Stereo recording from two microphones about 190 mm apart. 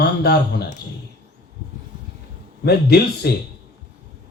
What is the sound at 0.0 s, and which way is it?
Speech, 55° left (ahead or behind).